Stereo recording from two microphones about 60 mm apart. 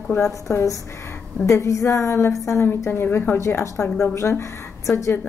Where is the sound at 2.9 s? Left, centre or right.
Left.